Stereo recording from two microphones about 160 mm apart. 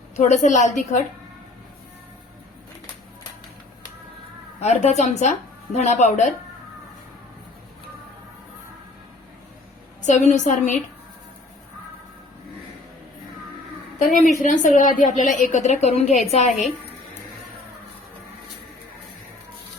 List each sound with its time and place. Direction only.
0.2 s a woman's voice: 50° left (ahead or behind)
4.6 s a woman's voice: 45° left (ahead or behind)
10.1 s a woman's voice: 50° left (ahead or behind)
14.3 s a woman's voice: 50° left (ahead or behind)